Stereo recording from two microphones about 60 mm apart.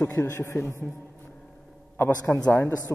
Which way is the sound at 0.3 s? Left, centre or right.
Left.